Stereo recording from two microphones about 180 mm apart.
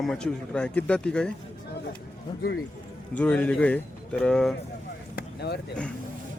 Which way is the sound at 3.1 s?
5° left (ahead or behind).